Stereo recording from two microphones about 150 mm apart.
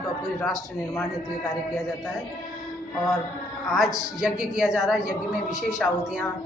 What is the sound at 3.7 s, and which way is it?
A woman's voice, centre (ahead or behind).